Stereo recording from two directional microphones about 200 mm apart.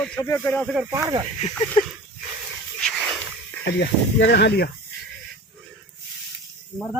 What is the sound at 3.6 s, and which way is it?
Speech, 65° left (ahead or behind).